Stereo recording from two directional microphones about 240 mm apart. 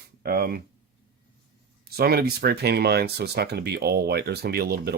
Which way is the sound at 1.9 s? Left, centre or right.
Right.